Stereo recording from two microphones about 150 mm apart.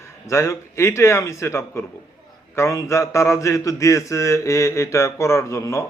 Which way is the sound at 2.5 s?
20° left (ahead or behind).